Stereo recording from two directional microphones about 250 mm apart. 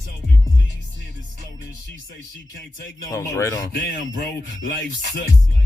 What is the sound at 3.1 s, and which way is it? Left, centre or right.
Speech, centre.